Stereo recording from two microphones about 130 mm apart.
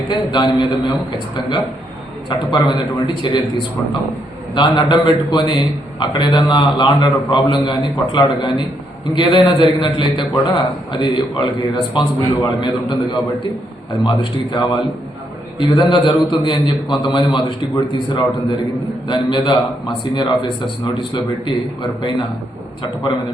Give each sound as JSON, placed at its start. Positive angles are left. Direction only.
{"t": 0.1, "sound": "a man's voice", "side_deg": 35}
{"t": 2.5, "sound": "a man's voice", "side_deg": 35}
{"t": 4.5, "sound": "a man's voice", "side_deg": 35}